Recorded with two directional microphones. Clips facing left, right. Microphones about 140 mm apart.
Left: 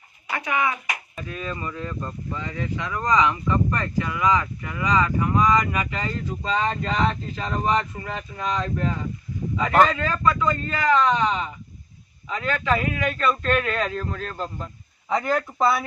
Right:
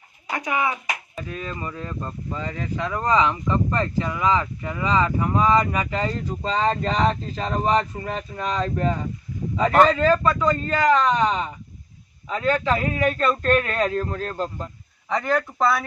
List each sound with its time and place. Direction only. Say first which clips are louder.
0.3 s speech: right 1 dB; 15° right (ahead or behind)
0.5 s speech: even; 30° right (ahead or behind)
9.9 s speech: right 5 dB; 35° right (ahead or behind)
15.1 s speech: even; 5° left (ahead or behind)